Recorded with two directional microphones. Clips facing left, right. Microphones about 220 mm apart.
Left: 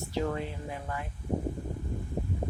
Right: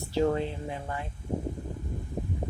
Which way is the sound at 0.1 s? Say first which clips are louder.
Right 6 dB; 30° right (ahead or behind).